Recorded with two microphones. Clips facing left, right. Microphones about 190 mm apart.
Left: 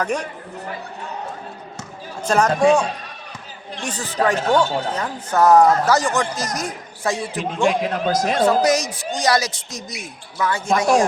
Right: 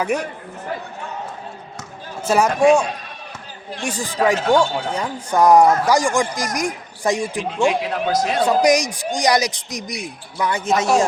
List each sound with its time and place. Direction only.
0.0 s speech: 10° right (ahead or behind)
2.2 s speech: 10° right (ahead or behind)
7.8 s speech: 45° left (ahead or behind)
8.4 s speech: 15° right (ahead or behind)